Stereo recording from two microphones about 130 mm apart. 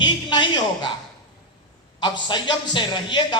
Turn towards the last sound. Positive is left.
turn(degrees=35)  # may be behind; listen again after turning